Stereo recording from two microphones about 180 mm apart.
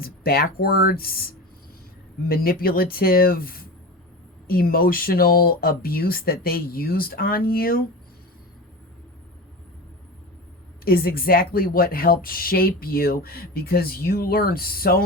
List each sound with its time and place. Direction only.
0.0 s a woman's voice: 55° left (ahead or behind)
10.8 s a woman's voice: 55° left (ahead or behind)